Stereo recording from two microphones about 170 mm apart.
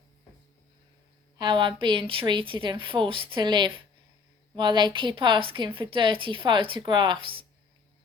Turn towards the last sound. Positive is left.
turn(degrees=-30)  # may be behind; listen again after turning